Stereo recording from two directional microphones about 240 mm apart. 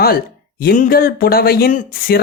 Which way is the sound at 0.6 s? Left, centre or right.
Left.